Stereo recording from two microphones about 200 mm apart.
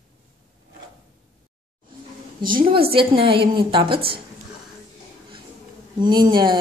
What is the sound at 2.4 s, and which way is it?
A woman's voice, 25° right (ahead or behind).